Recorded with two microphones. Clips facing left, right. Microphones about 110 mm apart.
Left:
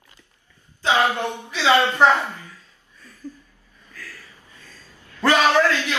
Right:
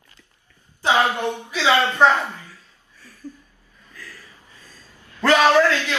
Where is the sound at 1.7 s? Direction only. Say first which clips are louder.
Even; 15° left (ahead or behind).